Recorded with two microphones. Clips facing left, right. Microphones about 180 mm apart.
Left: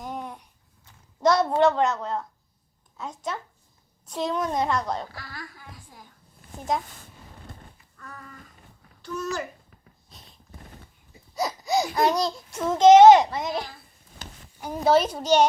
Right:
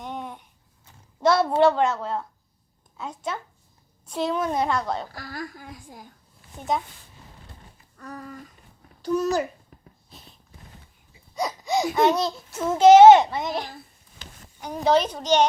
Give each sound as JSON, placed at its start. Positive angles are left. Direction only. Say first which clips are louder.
{"t": 0.0, "sound": "a sound", "louder": "even", "side_deg": 0}
{"t": 1.2, "sound": "a child's voice", "louder": "right 1 dB", "side_deg": -5}
{"t": 4.1, "sound": "a child's voice", "louder": "right 2 dB", "side_deg": -5}
{"t": 5.1, "sound": "a woman's voice", "louder": "right 6 dB", "side_deg": -40}
{"t": 6.6, "sound": "a child's voice", "louder": "right 1 dB", "side_deg": 0}
{"t": 7.9, "sound": "a sound", "louder": "right 7 dB", "side_deg": -40}
{"t": 9.0, "sound": "a child's voice", "louder": "right 8 dB", "side_deg": -35}
{"t": 10.1, "sound": "a sound", "louder": "right 3 dB", "side_deg": 0}
{"t": 11.3, "sound": "a child's voice", "louder": "even", "side_deg": 0}